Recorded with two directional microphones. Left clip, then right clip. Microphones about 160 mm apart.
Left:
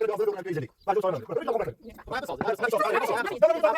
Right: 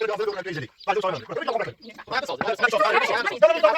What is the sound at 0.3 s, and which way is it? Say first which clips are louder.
Speech: even; 30° left (ahead or behind).